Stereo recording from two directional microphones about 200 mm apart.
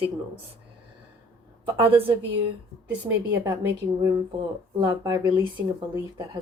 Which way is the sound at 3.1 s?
10° right (ahead or behind).